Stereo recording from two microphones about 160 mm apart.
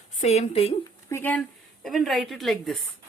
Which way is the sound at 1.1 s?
10° left (ahead or behind).